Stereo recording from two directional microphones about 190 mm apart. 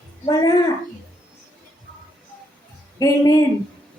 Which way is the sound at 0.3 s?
20° left (ahead or behind).